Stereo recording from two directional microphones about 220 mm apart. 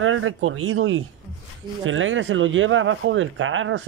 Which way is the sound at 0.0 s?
65° right (ahead or behind).